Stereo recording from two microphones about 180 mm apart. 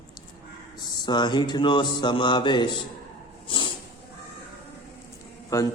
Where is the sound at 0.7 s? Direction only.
25° left (ahead or behind).